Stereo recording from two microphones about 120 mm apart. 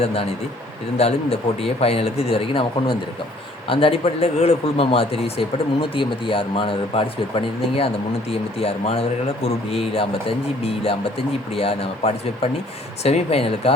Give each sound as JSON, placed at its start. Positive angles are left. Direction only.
{"t": 0.0, "sound": "speech", "side_deg": 55}